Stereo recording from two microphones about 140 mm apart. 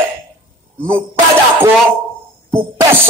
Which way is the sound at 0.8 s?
15° right (ahead or behind).